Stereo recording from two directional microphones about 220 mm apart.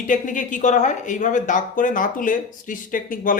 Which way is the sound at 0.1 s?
35° left (ahead or behind).